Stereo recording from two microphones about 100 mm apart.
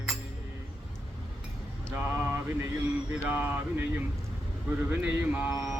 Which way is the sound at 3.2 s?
15° right (ahead or behind).